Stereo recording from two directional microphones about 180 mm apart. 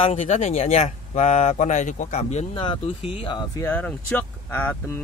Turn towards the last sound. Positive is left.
turn(degrees=15)  # may be behind; listen again after turning